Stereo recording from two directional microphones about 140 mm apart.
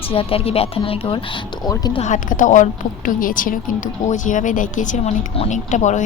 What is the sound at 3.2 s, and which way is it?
A woman's voice, 80° left.